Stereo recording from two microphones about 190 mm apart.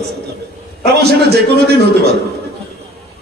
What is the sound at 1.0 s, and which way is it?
A man's voice, 60° right (ahead or behind).